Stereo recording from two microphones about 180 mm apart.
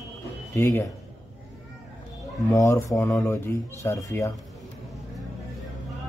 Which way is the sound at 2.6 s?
20° left (ahead or behind).